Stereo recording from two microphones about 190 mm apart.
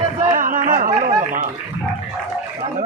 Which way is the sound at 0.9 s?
25° right (ahead or behind).